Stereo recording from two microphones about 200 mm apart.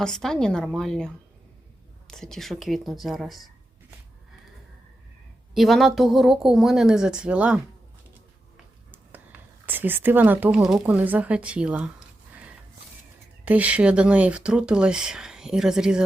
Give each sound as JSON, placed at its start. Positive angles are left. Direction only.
{"t": 0.0, "sound": "speech", "side_deg": 5}
{"t": 5.5, "sound": "speech", "side_deg": 0}
{"t": 9.6, "sound": "speech", "side_deg": -10}
{"t": 13.4, "sound": "speech", "side_deg": -5}